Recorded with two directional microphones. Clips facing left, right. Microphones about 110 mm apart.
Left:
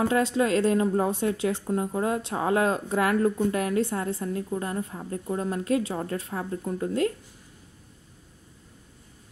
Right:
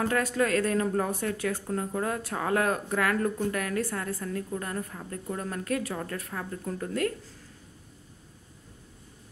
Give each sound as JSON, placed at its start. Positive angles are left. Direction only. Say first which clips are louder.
{"t": 0.0, "sound": "speech", "louder": "left 3 dB", "side_deg": 25}